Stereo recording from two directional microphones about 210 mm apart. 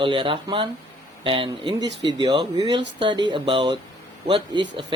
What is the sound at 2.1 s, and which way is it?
Speech, 20° right (ahead or behind).